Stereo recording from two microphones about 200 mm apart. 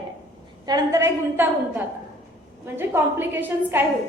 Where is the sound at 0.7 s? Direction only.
15° right (ahead or behind).